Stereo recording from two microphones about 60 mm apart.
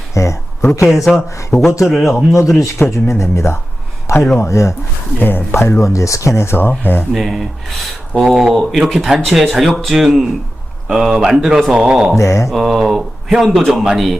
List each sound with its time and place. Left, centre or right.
0.1 s speech: left
0.6 s speech: left
0.9 s speech: centre
1.1 s speech: left
1.8 s speech: centre
2.9 s speech: left
5.2 s speech: left
5.5 s speech: left
7.1 s speech: centre
12.1 s speech: left
12.5 s speech: centre